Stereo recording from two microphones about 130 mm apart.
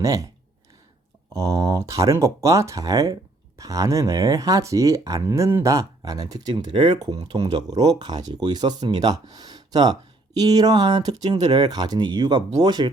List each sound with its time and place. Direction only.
0.0 s speech: 25° right (ahead or behind)
1.3 s speech: 25° right (ahead or behind)